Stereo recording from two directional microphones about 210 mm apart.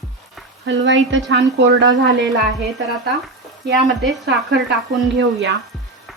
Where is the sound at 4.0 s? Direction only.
Centre (ahead or behind).